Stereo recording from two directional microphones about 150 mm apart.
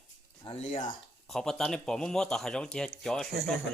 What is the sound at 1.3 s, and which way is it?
A man's voice, 5° left (ahead or behind).